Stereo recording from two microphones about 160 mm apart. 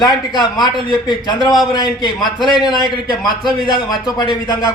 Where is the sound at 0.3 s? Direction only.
25° left (ahead or behind).